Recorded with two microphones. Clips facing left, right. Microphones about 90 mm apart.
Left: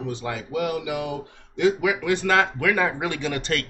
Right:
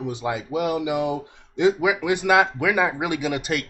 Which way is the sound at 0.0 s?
15° right (ahead or behind).